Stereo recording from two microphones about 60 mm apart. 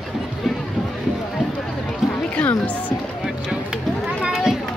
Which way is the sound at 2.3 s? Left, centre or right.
Left.